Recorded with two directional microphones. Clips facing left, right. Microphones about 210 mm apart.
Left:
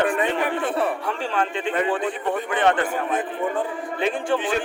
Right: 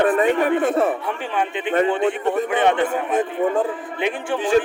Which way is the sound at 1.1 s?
20° right (ahead or behind).